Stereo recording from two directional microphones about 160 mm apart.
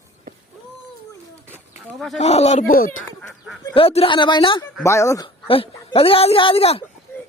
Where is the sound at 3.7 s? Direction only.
35° left (ahead or behind).